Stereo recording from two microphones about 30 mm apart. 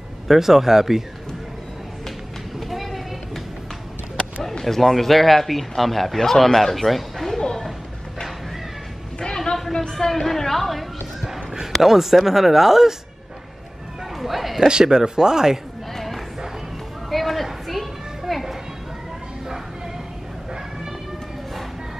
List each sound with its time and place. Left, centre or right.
0.3 s speech: centre
2.7 s vehicle: centre
4.6 s speech: centre
9.6 s speech: centre
11.8 s speech: centre
14.1 s a sound: centre
14.7 s speech: right
17.1 s a sound: centre
17.6 s children playing: centre